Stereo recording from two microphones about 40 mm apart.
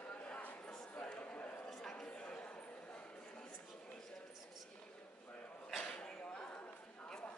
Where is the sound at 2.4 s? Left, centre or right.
Left.